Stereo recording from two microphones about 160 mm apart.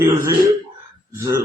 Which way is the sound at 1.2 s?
20° right (ahead or behind).